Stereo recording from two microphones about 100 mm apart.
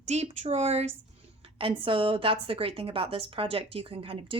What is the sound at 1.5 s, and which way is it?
A woman's voice, 60° right (ahead or behind).